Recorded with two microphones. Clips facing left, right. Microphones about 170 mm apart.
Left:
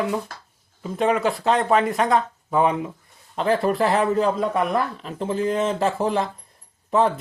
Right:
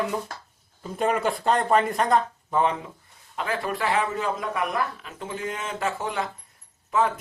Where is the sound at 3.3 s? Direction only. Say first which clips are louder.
Left 8 dB; 35° left (ahead or behind).